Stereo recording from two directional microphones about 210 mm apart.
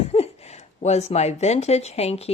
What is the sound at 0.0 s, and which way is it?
Speech, 30° left (ahead or behind).